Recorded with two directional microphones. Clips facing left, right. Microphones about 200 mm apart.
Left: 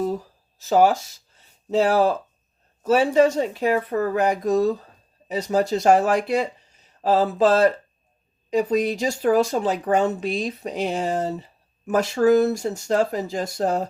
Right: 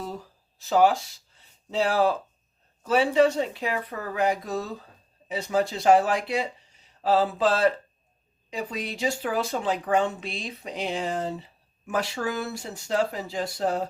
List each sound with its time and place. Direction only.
0.6 s speech: 45° left (ahead or behind)